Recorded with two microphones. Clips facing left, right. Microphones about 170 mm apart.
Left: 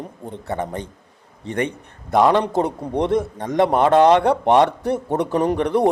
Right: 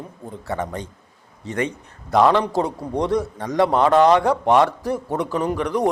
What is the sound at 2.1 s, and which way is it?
A man's voice, 20° left (ahead or behind).